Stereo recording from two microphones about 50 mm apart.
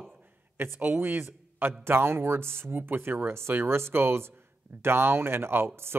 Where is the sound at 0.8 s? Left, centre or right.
Right.